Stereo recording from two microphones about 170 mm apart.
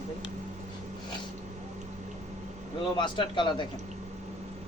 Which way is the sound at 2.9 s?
25° left (ahead or behind).